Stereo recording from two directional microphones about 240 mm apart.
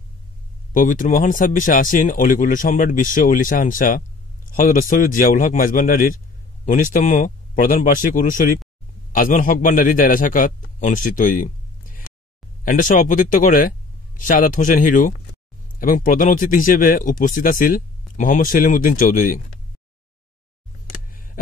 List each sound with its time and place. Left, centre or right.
0.7 s speech: left
12.6 s speech: left